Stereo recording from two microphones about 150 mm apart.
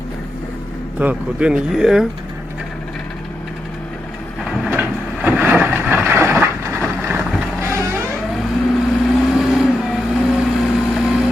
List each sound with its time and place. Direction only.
0.9 s speech: 10° right (ahead or behind)
4.7 s vehicle: 10° right (ahead or behind)
8.7 s vehicle: centre (ahead or behind)